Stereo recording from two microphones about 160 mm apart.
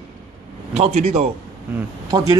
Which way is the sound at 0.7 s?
45° right (ahead or behind).